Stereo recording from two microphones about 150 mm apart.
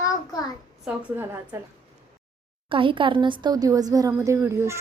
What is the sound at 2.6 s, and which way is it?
A woman's voice, 35° right (ahead or behind).